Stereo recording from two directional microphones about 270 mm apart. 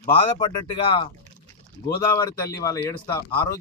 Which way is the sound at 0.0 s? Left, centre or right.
Centre.